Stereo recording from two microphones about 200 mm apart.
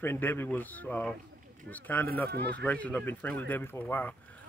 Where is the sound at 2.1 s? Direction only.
50° right (ahead or behind).